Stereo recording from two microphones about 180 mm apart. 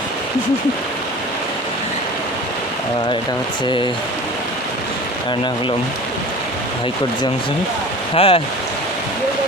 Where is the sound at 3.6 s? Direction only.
25° left (ahead or behind).